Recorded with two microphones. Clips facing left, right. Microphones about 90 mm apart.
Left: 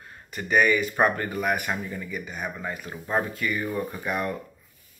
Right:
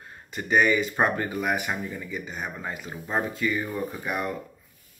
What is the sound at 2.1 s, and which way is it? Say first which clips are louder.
Speech: left 1 dB; 30° right (ahead or behind).